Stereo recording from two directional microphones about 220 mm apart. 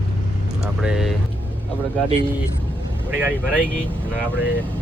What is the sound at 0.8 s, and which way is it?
Vehicle, centre (ahead or behind).